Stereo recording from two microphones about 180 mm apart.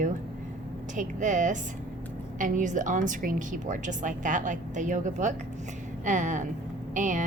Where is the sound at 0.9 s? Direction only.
45° right (ahead or behind).